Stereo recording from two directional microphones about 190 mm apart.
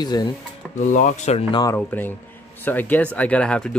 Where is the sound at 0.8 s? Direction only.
45° left (ahead or behind).